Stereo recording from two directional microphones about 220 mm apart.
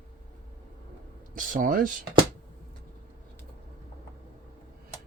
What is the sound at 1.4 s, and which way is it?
Speech, 35° right (ahead or behind).